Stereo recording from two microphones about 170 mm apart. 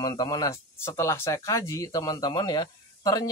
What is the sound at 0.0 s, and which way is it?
Speech, 20° left (ahead or behind).